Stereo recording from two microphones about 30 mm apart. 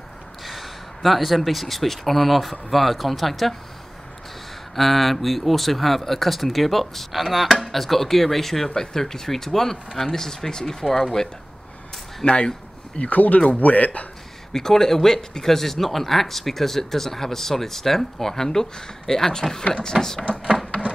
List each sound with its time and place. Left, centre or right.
0.5 s speech: centre
4.7 s speech: centre
7.7 s speech: centre
8.6 s speech: centre
12.3 s speech: left
13.1 s speech: left
14.5 s speech: centre